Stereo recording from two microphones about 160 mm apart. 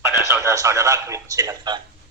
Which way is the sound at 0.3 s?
20° right (ahead or behind).